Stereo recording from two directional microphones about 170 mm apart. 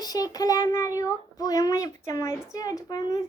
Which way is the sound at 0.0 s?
20° left (ahead or behind).